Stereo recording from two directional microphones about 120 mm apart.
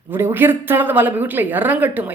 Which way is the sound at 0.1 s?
20° right (ahead or behind).